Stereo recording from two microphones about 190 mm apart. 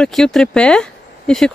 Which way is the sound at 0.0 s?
5° left (ahead or behind).